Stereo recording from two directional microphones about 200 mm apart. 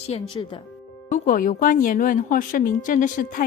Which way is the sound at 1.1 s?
40° left (ahead or behind).